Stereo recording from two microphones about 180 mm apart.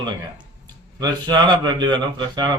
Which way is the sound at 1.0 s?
25° right (ahead or behind).